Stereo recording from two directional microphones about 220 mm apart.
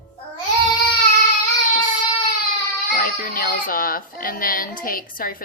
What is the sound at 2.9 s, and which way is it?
A child's voice, 40° left (ahead or behind).